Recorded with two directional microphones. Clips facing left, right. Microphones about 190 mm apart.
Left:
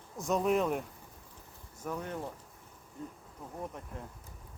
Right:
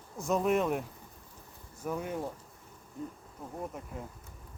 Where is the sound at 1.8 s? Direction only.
10° right (ahead or behind).